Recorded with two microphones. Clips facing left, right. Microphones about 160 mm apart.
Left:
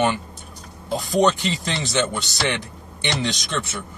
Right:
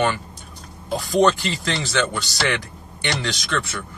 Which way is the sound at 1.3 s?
20° left (ahead or behind).